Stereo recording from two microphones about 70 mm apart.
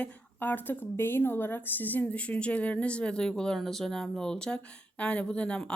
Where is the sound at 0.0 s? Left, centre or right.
Left.